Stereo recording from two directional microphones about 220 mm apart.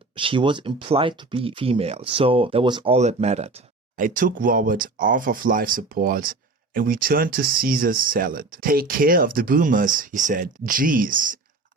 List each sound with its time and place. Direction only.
0.2 s speech: 20° right (ahead or behind); by 11.3 s 40° right (ahead or behind)